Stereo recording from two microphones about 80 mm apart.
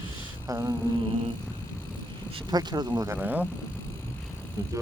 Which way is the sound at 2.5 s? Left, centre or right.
Right.